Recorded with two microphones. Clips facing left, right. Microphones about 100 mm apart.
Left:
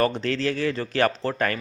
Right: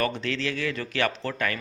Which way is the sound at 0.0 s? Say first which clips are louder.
Left 4 dB; 35° left (ahead or behind).